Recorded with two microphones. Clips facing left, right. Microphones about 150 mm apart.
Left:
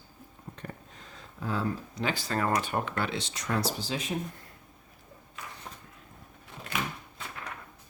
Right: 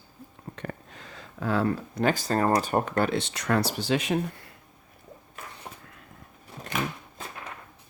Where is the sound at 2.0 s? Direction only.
40° right (ahead or behind); by 4.5 s 75° right (ahead or behind).